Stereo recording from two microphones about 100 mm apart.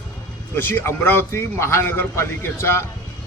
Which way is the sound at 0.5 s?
20° left (ahead or behind).